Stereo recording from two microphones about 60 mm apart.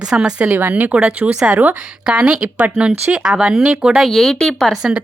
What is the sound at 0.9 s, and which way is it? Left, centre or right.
Speech, centre.